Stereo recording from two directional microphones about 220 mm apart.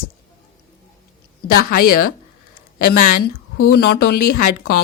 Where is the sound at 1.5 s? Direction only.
40° left (ahead or behind).